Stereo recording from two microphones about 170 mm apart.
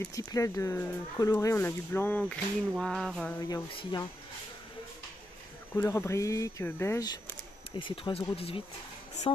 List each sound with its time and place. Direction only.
0.0 s speech: 20° left (ahead or behind)
2.8 s music: centre (ahead or behind)
3.4 s speech: 20° left (ahead or behind)
5.8 s speech: 15° left (ahead or behind)
7.7 s speech: 30° left (ahead or behind)